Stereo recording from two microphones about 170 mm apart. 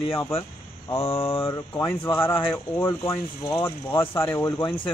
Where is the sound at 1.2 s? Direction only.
30° left (ahead or behind); by 4.5 s 15° left (ahead or behind).